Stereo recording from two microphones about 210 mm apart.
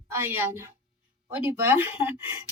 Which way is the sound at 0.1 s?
10° right (ahead or behind).